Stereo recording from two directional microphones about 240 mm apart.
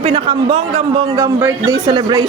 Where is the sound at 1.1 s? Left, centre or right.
Centre.